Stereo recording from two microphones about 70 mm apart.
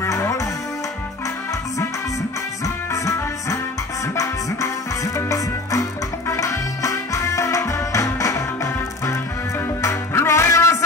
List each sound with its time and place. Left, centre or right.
0.0 s music: left
2.6 s music: left
9.8 s music: left